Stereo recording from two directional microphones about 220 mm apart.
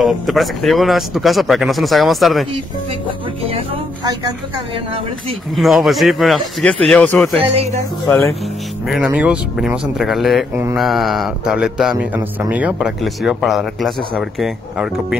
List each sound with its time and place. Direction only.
0.0 s speech: centre (ahead or behind)
4.0 s a woman's voice: 15° right (ahead or behind)
5.6 s speech: centre (ahead or behind)
7.4 s speech: 25° right (ahead or behind)
8.1 s speech: 5° left (ahead or behind)
10.5 s a woman's voice: 10° right (ahead or behind)
10.8 s speech: centre (ahead or behind)